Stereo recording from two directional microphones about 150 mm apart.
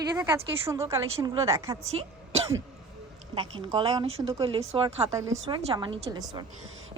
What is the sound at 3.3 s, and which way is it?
Speech, 35° right (ahead or behind).